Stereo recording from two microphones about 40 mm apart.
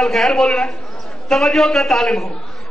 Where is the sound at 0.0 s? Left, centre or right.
Centre.